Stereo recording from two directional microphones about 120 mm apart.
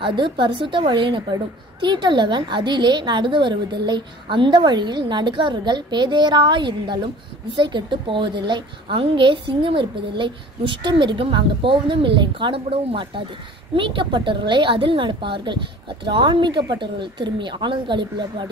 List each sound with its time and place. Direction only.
0.0 s a woman's voice: 40° right (ahead or behind)